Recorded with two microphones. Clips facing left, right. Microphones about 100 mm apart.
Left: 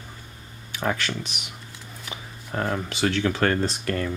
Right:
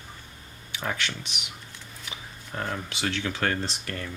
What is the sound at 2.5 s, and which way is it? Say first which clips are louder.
Speech: left 5 dB; 65° left (ahead or behind).